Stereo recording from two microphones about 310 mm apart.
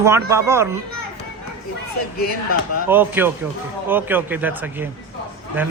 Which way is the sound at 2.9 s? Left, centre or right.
Centre.